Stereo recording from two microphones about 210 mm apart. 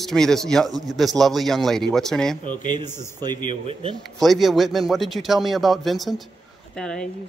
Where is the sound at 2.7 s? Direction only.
20° right (ahead or behind).